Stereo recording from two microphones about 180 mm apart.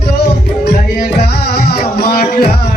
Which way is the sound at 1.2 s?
60° left (ahead or behind).